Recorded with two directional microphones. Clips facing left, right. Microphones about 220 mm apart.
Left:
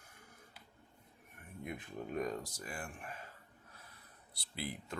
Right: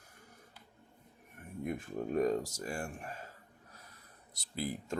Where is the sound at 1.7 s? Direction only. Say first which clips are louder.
Right 7 dB; 45° right (ahead or behind).